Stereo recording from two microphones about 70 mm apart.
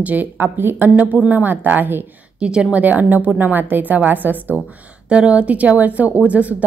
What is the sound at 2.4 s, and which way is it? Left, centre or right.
Speech, centre.